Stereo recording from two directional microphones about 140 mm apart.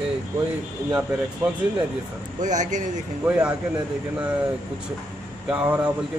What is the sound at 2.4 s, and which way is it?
Speech, 60° right (ahead or behind).